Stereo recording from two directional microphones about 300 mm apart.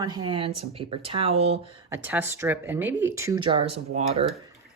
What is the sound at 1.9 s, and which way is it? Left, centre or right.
Speech, centre.